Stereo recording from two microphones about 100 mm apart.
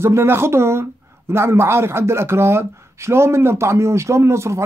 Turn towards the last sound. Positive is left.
turn(degrees=-30)  # may be behind; listen again after turning